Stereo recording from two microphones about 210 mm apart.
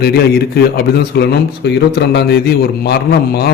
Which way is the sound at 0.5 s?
50° left (ahead or behind).